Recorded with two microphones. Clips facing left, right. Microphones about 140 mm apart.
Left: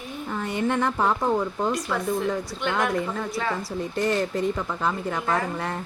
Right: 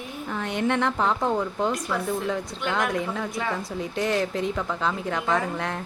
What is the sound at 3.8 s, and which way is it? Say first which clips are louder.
A woman's voice: left 1 dB; centre (ahead or behind).